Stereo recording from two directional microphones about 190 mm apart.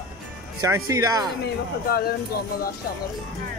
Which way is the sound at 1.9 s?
55° left (ahead or behind).